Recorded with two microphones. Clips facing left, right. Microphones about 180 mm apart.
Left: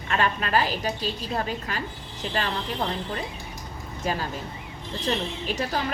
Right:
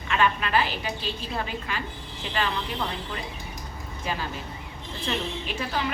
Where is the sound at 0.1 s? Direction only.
40° left (ahead or behind).